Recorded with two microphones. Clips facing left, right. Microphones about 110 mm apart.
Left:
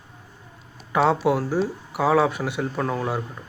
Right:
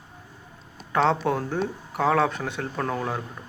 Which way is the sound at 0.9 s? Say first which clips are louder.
Left 3 dB; 5° left (ahead or behind).